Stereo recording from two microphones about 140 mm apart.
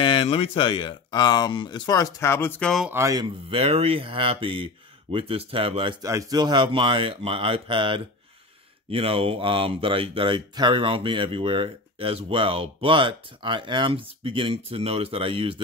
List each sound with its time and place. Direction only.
0.0 s speech: 40° left (ahead or behind); by 2.7 s 15° left (ahead or behind)
2.9 s a man's voice: 20° right (ahead or behind)
3.4 s speech: 45° right (ahead or behind)
6.0 s speech: 25° right (ahead or behind)